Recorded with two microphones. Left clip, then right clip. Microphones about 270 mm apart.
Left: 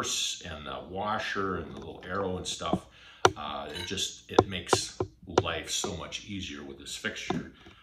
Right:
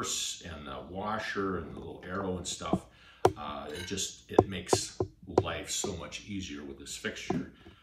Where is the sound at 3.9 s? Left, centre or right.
Centre.